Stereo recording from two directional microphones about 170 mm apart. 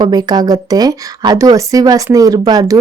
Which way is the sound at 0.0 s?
25° right (ahead or behind).